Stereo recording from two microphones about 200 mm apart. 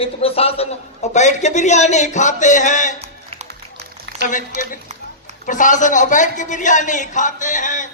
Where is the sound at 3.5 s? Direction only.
55° right (ahead or behind).